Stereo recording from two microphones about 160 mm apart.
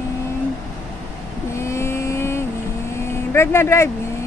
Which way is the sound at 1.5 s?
15° left (ahead or behind).